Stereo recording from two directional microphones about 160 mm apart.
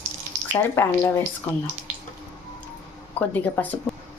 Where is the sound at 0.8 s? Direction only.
10° left (ahead or behind).